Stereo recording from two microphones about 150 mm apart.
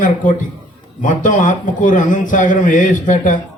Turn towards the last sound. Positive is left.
turn(degrees=60)  # may be behind; listen again after turning